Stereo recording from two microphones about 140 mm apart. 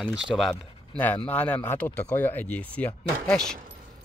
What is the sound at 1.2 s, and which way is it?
Speech, 10° left (ahead or behind).